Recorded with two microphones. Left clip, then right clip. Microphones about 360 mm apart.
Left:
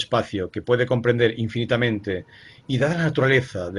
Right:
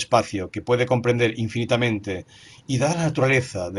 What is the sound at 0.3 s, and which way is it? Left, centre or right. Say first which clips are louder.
Speech: left 2 dB; centre.